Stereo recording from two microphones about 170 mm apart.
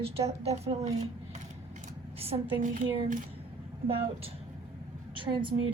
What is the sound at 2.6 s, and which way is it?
Speech, 50° right (ahead or behind).